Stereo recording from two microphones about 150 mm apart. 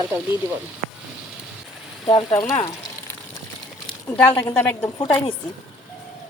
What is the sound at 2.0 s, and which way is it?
Speech, 30° left (ahead or behind).